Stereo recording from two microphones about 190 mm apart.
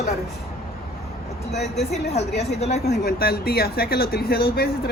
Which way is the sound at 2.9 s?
55° left (ahead or behind).